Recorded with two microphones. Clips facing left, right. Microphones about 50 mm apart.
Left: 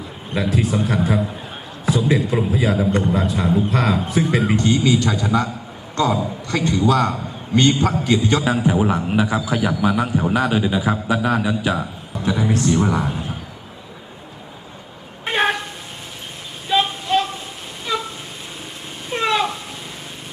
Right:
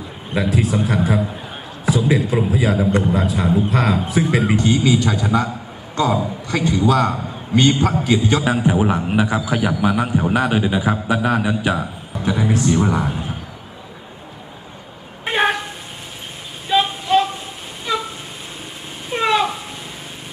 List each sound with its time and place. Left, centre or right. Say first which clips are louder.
0.3 s a man's voice: right 1 dB; centre
4.5 s a man's voice: even; centre
9.9 s a man's voice: right 1 dB; centre
10.3 s a man's voice: right 1 dB; right
11.4 s a man's voice: right 1 dB; right
12.3 s a man's voice: right 1 dB; centre
15.2 s vehicle: right 1 dB; centre
16.6 s a sound: right 2 dB; centre
19.1 s a sound: right 2 dB; centre